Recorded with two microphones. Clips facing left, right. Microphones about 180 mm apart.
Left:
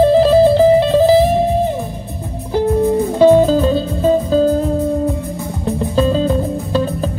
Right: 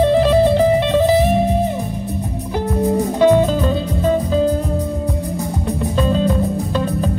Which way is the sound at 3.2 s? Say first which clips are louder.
Left 4 dB; 30° left (ahead or behind).